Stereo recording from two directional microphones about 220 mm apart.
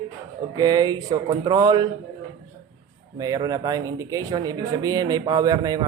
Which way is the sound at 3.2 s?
15° right (ahead or behind).